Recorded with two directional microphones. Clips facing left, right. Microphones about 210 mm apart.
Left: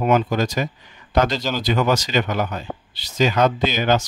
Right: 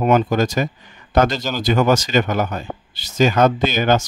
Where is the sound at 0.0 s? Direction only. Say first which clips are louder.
Right 3 dB; 45° right (ahead or behind).